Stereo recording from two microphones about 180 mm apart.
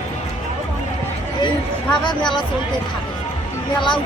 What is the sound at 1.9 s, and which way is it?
Speech, 25° left (ahead or behind).